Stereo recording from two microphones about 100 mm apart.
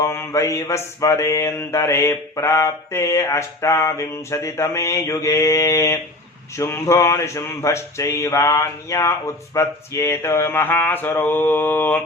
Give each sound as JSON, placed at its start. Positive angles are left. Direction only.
{"t": 0.0, "sound": "mantra", "side_deg": 25}